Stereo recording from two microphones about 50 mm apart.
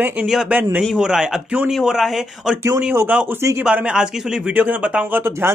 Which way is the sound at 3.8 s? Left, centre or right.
Centre.